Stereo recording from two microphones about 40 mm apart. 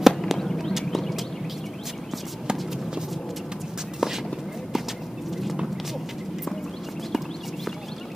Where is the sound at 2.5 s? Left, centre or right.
Centre.